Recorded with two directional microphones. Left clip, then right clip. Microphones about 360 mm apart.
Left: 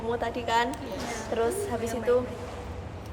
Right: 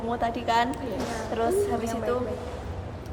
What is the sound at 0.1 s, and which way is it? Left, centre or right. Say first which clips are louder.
A woman's voice: right 2 dB; centre.